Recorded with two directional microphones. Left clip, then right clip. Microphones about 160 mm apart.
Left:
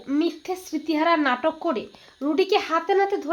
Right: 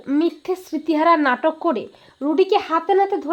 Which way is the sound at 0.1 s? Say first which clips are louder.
Right 4 dB; 50° right (ahead or behind).